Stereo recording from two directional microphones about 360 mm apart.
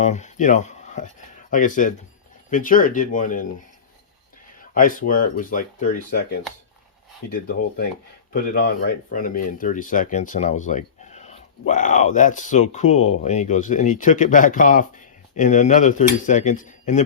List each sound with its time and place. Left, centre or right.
0.0 s speech: centre
4.7 s speech: left